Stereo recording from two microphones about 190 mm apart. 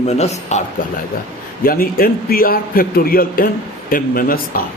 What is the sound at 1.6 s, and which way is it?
A man's voice, 50° left (ahead or behind).